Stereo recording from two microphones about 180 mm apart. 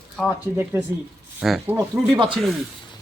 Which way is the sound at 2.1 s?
25° right (ahead or behind).